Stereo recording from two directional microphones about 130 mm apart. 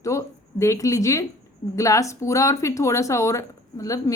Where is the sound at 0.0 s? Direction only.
25° left (ahead or behind).